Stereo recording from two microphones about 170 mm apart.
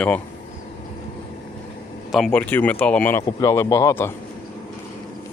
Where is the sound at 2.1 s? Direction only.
5° left (ahead or behind).